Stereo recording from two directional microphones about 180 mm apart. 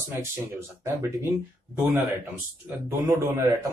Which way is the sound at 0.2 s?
15° right (ahead or behind).